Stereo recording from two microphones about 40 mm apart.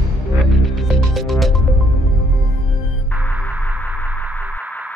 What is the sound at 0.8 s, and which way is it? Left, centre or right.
Music, centre.